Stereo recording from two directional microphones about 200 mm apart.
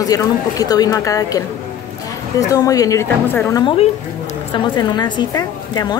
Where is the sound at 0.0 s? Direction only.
15° left (ahead or behind).